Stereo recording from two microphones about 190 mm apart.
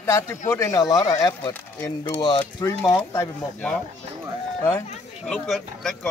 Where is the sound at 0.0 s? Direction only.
15° left (ahead or behind).